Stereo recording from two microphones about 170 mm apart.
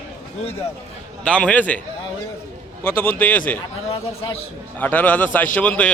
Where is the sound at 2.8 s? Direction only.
15° left (ahead or behind).